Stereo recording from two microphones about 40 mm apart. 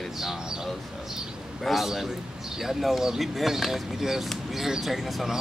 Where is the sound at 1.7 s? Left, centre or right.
Centre.